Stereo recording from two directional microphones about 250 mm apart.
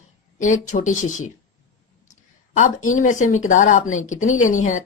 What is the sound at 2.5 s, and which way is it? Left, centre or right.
Speech, left.